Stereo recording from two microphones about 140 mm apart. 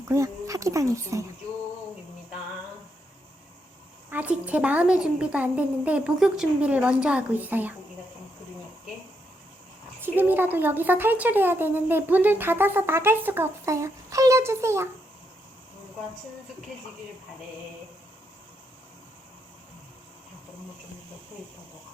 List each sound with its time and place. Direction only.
0.1 s speech: 20° right (ahead or behind)
4.1 s speech: 10° right (ahead or behind)
10.0 s speech: 15° right (ahead or behind)